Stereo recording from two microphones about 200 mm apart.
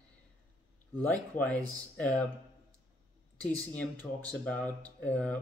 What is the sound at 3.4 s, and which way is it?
Speech, 5° left (ahead or behind).